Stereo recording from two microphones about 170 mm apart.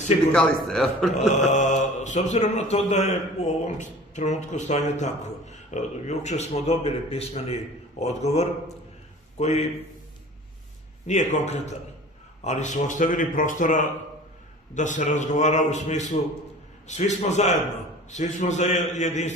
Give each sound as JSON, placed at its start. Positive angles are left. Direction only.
{"t": 0.3, "sound": "a man's voice", "side_deg": 5}
{"t": 1.1, "sound": "mantra", "side_deg": 45}
{"t": 2.9, "sound": "a man's voice", "side_deg": 40}
{"t": 11.1, "sound": "a man's voice", "side_deg": 40}
{"t": 12.4, "sound": "mantra", "side_deg": 45}